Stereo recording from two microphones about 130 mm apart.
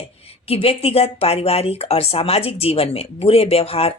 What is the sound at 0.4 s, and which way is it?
Speech, 50° left (ahead or behind).